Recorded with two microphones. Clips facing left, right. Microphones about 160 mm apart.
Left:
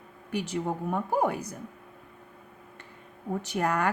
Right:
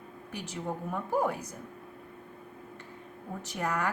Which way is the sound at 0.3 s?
70° left (ahead or behind).